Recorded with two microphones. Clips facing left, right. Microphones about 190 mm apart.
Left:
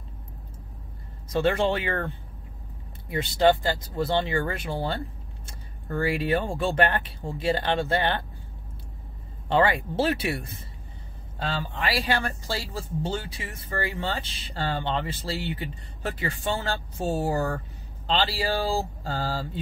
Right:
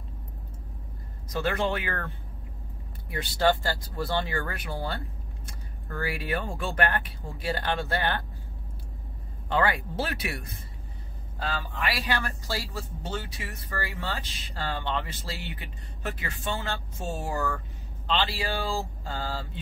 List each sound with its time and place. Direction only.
1.3 s speech: 30° left (ahead or behind)
9.5 s speech: 25° left (ahead or behind)